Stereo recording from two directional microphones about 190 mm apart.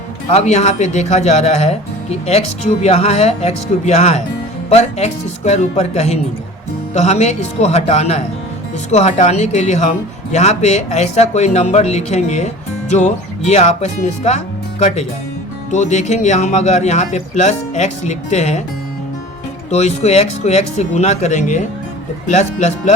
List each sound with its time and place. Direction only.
0.3 s speech: 35° left (ahead or behind)
19.7 s speech: 35° left (ahead or behind)